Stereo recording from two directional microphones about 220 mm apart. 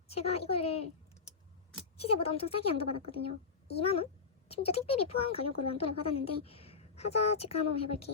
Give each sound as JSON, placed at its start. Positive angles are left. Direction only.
{"t": 0.1, "sound": "a woman's voice", "side_deg": 25}
{"t": 2.0, "sound": "speech", "side_deg": 25}